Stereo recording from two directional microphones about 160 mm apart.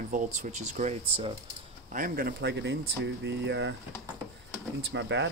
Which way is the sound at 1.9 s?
60° right (ahead or behind).